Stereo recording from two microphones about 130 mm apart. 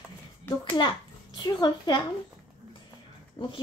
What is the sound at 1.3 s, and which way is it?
Speech, 30° left (ahead or behind).